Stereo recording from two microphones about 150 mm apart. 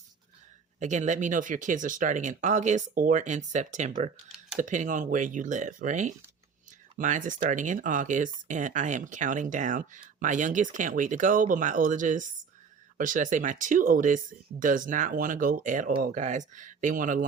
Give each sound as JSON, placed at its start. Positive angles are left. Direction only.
{"t": 0.8, "sound": "speech", "side_deg": -55}